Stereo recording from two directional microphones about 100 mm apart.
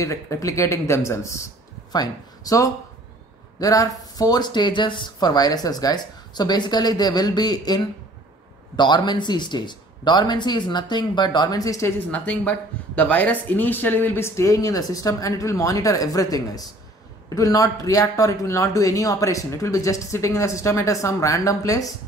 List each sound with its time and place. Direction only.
0.0 s speech: 30° left (ahead or behind)
12.1 s speech: 15° left (ahead or behind); by 21.9 s 35° left (ahead or behind)